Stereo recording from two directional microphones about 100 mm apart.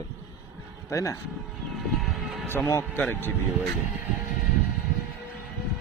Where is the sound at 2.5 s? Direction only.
25° left (ahead or behind).